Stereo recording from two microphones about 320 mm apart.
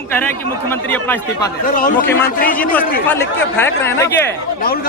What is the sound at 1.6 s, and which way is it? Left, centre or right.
Speech, left.